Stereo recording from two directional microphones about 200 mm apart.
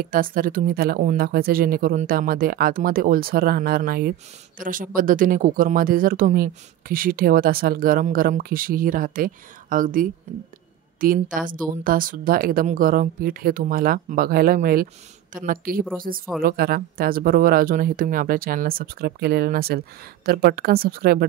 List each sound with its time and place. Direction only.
0.0 s speech: 45° right (ahead or behind)